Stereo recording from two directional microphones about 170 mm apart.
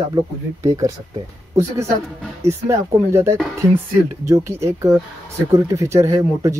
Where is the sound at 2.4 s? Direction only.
15° right (ahead or behind).